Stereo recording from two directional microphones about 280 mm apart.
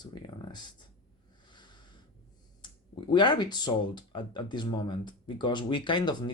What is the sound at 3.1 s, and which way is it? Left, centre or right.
Speech, centre.